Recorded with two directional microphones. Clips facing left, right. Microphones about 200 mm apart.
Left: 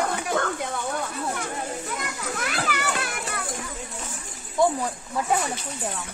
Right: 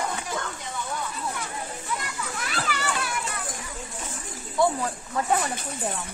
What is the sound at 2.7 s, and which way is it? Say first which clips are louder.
Children playing: left 1 dB; 55° left (ahead or behind).